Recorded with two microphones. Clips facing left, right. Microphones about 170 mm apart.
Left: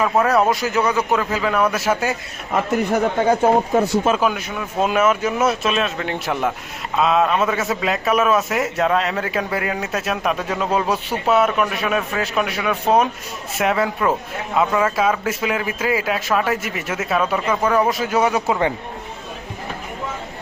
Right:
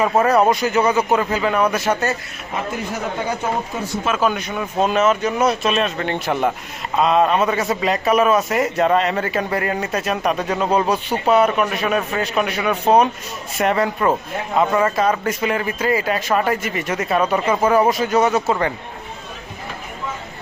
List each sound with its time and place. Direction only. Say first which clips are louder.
0.0 s a man's voice: right 2 dB; centre (ahead or behind)
3.4 s speech: left 8 dB; 55° left (ahead or behind)
4.3 s a man's voice: right 2 dB; 5° left (ahead or behind)
17.4 s speech: right 2 dB; 20° right (ahead or behind)
17.7 s a man's voice: right 3 dB; centre (ahead or behind)